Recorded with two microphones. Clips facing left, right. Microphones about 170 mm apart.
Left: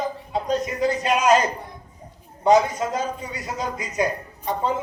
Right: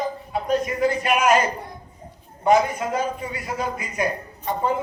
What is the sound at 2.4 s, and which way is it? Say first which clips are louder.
A man's voice: left 1 dB; 20° left (ahead or behind).